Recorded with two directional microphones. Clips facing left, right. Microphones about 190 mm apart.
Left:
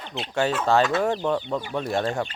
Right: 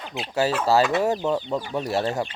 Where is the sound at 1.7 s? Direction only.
5° right (ahead or behind).